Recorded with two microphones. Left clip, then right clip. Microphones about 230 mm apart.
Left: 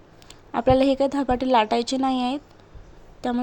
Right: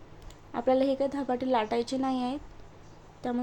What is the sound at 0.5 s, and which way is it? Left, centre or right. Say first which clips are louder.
A woman's voice: left 7 dB; left.